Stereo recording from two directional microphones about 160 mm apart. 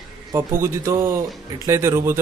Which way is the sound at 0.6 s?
15° right (ahead or behind).